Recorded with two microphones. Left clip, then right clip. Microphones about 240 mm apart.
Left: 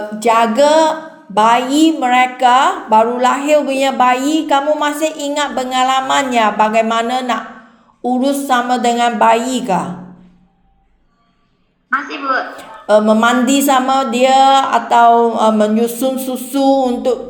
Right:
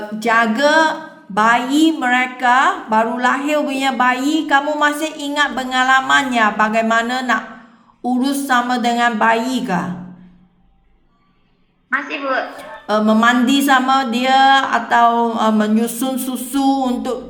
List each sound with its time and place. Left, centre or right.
0.2 s a woman's voice: centre
11.9 s a woman's voice: centre
12.5 s a woman's voice: centre